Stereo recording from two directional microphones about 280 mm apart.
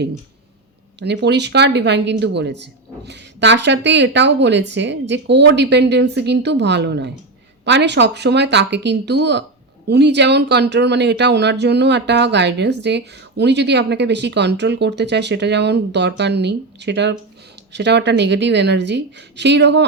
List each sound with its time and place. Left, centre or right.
0.9 s speech: right